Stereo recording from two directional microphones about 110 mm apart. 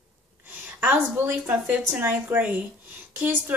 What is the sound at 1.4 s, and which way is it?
A woman's voice, 15° right (ahead or behind).